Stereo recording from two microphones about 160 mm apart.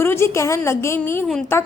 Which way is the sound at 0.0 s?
15° left (ahead or behind).